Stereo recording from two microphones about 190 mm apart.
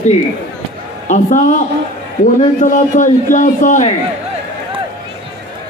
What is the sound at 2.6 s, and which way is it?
A man's voice, 45° left (ahead or behind).